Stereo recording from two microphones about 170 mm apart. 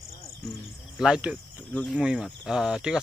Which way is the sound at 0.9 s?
5° right (ahead or behind).